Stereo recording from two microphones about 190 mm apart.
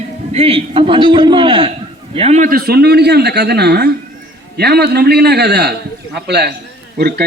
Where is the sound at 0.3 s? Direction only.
30° right (ahead or behind).